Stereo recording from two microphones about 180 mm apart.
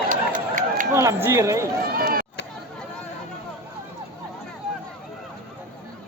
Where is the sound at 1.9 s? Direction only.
55° right (ahead or behind).